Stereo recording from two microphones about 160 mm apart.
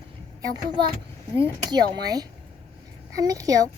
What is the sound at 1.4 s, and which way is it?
A woman's voice, 25° right (ahead or behind).